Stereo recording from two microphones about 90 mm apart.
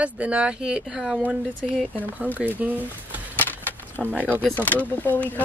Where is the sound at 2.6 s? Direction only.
10° right (ahead or behind).